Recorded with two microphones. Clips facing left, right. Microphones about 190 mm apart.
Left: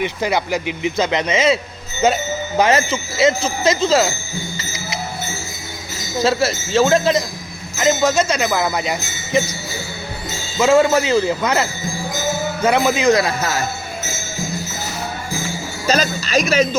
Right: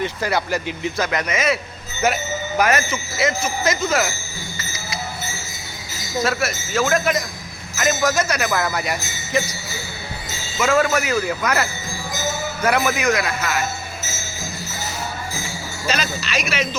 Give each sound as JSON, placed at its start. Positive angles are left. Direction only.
{"t": 0.0, "sound": "speech", "side_deg": 20}
{"t": 4.5, "sound": "music", "side_deg": 25}
{"t": 6.2, "sound": "speech", "side_deg": 30}
{"t": 10.6, "sound": "speech", "side_deg": 25}
{"t": 15.9, "sound": "music", "side_deg": 40}